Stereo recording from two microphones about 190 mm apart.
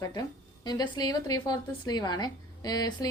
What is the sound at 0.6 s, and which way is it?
A woman's voice, 20° left (ahead or behind).